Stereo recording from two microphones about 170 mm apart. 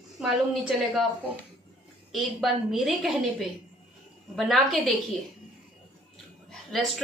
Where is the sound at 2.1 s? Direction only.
Centre (ahead or behind).